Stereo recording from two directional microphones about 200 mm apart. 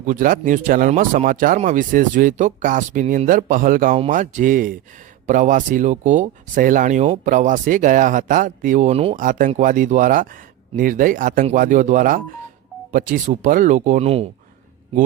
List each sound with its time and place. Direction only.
0.0 s speech: 40° right (ahead or behind)